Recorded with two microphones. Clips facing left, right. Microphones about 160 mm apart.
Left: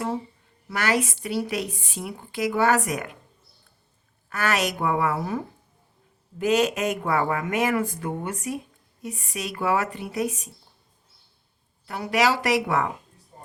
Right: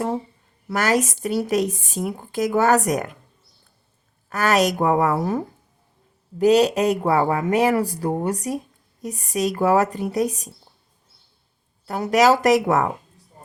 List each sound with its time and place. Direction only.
0.7 s a woman's voice: 40° right (ahead or behind)
4.3 s speech: 40° right (ahead or behind)
6.4 s speech: 35° right (ahead or behind)
11.9 s a woman's voice: 45° right (ahead or behind)